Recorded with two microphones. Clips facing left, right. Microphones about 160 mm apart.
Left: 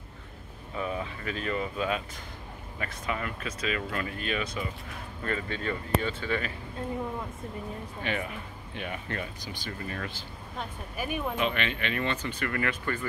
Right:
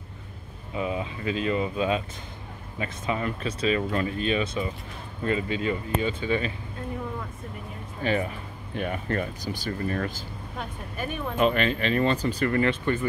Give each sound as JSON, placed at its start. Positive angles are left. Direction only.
{"t": 0.7, "sound": "speech", "side_deg": -15}
{"t": 8.0, "sound": "speech", "side_deg": -35}
{"t": 11.0, "sound": "speech", "side_deg": 10}
{"t": 11.3, "sound": "speech", "side_deg": -40}